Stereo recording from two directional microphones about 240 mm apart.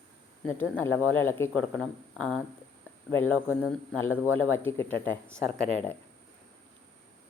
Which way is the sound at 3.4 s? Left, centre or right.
Centre.